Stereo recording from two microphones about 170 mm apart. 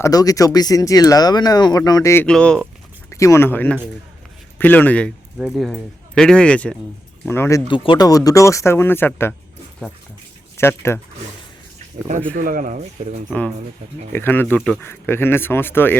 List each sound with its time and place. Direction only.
0.0 s speech: 20° left (ahead or behind)
2.2 s speech: 5° left (ahead or behind)
3.1 s speech: 15° left (ahead or behind)
7.7 s speech: 25° left (ahead or behind)
10.6 s speech: 15° left (ahead or behind)
12.4 s speech: 55° right (ahead or behind)
14.1 s speech: 10° left (ahead or behind)